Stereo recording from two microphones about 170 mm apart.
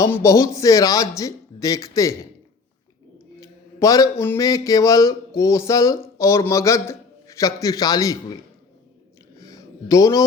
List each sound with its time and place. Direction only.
0.0 s speech: 15° left (ahead or behind)
3.4 s speech: 20° left (ahead or behind)
9.4 s a sound: 20° left (ahead or behind)